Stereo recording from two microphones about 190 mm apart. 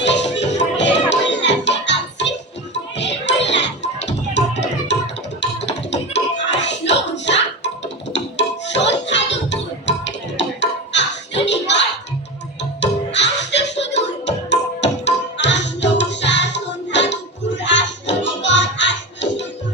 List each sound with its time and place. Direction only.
0.0 s music: 70° left (ahead or behind)